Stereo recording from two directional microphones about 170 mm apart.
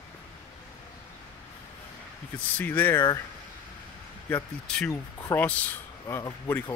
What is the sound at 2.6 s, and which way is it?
Speech, 10° left (ahead or behind).